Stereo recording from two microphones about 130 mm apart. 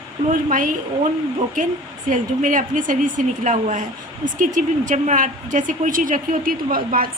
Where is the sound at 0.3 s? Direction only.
90° right.